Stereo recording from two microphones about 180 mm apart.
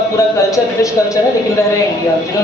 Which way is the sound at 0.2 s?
20° left (ahead or behind).